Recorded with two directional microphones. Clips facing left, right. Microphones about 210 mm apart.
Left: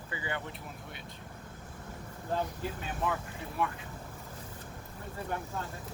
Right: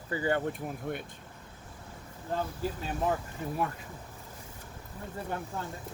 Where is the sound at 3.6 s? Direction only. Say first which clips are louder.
Left 1 dB; 40° right (ahead or behind).